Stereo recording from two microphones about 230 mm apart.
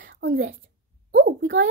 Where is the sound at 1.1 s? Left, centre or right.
Right.